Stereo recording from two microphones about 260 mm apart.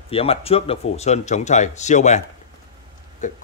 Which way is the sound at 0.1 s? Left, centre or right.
Left.